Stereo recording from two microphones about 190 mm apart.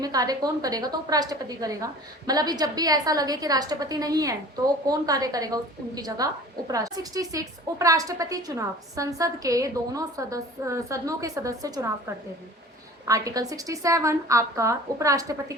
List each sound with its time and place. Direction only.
0.0 s a woman's voice: 20° right (ahead or behind)
13.1 s a woman's voice: 20° right (ahead or behind)